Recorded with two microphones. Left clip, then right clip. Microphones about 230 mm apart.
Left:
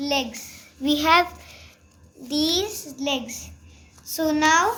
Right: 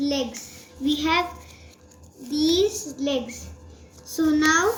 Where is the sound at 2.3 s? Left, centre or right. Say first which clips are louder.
Right 2 dB; left.